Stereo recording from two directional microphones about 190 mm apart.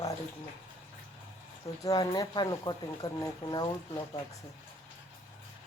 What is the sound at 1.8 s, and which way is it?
Speech, 20° left (ahead or behind).